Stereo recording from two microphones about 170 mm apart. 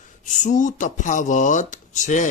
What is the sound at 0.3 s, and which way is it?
Speech, 45° left (ahead or behind).